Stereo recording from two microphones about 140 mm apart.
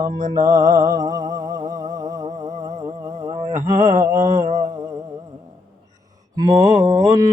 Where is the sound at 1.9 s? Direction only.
25° right (ahead or behind).